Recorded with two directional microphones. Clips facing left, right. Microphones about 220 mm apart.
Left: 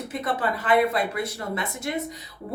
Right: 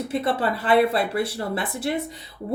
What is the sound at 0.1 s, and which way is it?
Speech, 30° right (ahead or behind).